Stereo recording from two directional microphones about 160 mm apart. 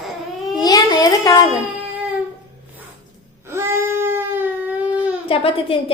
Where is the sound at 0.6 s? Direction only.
25° left (ahead or behind).